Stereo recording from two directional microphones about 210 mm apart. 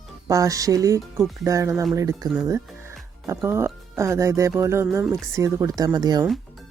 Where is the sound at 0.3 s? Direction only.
15° right (ahead or behind).